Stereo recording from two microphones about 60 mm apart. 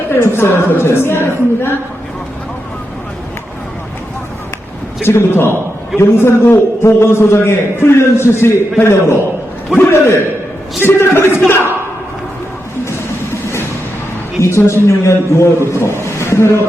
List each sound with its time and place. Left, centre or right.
0.1 s a man's voice: left
5.0 s a man's voice: left
14.4 s a man's voice: left
15.8 s a sound: left